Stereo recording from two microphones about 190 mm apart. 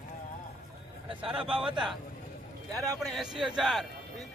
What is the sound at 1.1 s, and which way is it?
Speech, 25° right (ahead or behind).